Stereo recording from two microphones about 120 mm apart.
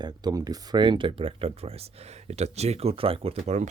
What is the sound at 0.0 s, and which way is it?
Speech, 35° right (ahead or behind).